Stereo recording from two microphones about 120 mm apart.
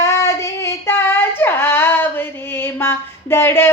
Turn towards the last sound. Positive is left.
turn(degrees=20)  # may be behind; listen again after turning